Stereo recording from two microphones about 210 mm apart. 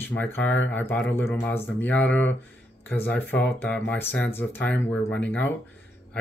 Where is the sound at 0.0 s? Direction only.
10° left (ahead or behind).